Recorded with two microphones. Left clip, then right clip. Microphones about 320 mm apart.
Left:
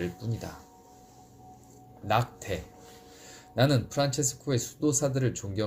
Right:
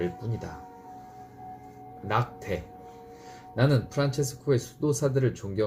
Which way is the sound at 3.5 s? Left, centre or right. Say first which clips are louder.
Even; left.